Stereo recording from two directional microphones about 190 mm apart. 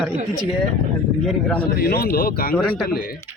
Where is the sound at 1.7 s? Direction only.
50° left (ahead or behind).